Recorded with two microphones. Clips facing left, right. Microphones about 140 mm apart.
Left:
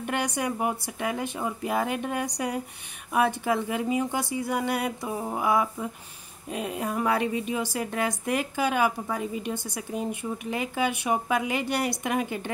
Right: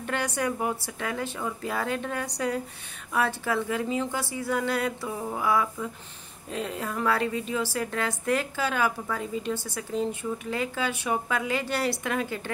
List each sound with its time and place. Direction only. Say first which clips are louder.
0.0 s speech: even; 15° left (ahead or behind)